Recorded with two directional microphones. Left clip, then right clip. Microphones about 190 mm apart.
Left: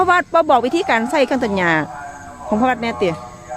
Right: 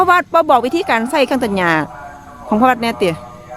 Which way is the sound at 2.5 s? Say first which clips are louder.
Right 4 dB; 20° right (ahead or behind).